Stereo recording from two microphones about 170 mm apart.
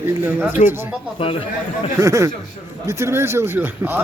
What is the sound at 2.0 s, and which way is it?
Speech, 15° right (ahead or behind).